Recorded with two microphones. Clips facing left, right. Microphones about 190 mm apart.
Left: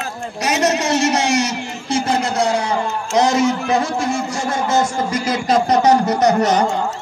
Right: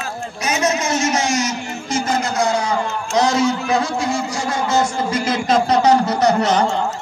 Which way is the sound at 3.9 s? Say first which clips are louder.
Left 1 dB; 50° left (ahead or behind).